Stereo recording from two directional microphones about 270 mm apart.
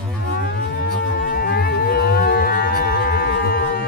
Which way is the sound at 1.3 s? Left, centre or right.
Left.